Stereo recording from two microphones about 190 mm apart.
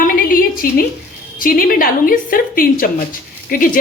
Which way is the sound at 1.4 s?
50° left (ahead or behind).